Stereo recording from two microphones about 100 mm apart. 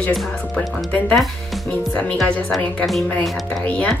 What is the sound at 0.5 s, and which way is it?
A woman's voice, 15° left (ahead or behind).